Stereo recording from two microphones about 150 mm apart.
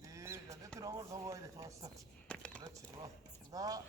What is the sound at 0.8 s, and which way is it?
Speech, 20° right (ahead or behind).